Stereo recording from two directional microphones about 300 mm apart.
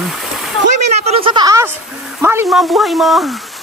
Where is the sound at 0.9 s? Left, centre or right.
Right.